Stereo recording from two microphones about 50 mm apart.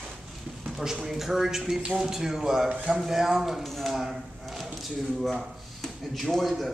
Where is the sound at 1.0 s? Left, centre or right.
Centre.